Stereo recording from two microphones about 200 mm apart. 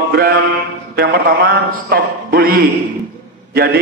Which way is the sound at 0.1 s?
50° right (ahead or behind).